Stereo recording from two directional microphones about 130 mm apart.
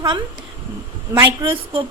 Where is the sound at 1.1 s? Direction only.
20° right (ahead or behind).